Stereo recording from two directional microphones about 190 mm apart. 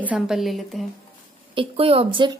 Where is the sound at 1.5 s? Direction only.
30° right (ahead or behind).